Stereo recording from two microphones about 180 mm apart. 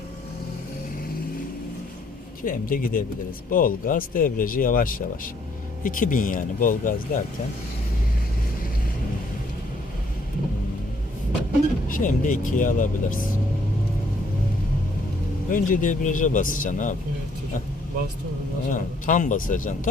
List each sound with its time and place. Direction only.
2.4 s speech: 50° left (ahead or behind)
11.9 s speech: 50° left (ahead or behind)
15.4 s speech: 50° left (ahead or behind)
18.7 s speech: 45° left (ahead or behind)